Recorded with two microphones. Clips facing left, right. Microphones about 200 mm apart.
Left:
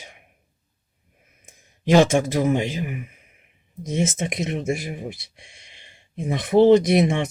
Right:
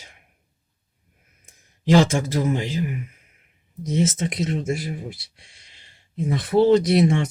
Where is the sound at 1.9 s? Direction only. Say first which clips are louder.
Left 1 dB; 20° left (ahead or behind).